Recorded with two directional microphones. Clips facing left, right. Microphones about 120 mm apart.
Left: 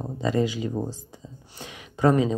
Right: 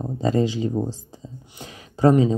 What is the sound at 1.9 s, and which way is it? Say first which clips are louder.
Speech: right 4 dB; 30° right (ahead or behind).